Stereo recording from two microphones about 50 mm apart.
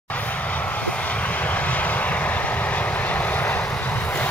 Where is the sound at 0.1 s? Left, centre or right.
Left.